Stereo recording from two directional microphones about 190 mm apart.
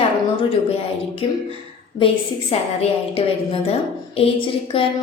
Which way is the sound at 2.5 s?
35° left (ahead or behind).